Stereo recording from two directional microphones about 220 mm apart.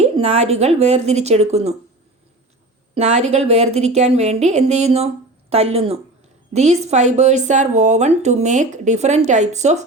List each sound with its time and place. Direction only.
0.0 s a woman's voice: 30° right (ahead or behind)
2.9 s a woman's voice: 30° right (ahead or behind)